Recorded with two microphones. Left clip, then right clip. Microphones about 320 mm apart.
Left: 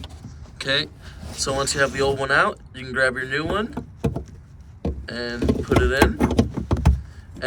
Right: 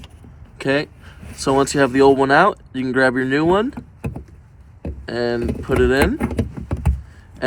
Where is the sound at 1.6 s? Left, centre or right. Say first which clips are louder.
Right 7 dB; centre.